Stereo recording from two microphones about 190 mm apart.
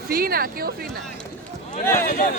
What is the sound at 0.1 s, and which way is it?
Speech, 50° right (ahead or behind).